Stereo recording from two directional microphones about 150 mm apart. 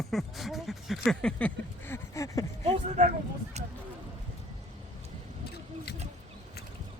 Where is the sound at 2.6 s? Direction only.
50° right (ahead or behind).